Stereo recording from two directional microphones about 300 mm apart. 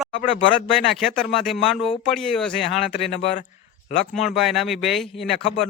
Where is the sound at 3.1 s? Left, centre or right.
Centre.